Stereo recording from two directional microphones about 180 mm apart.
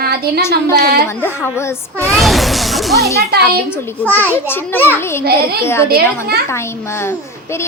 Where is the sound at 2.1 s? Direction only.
Centre (ahead or behind).